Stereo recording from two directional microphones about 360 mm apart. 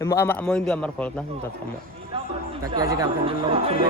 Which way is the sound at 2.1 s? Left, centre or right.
Centre.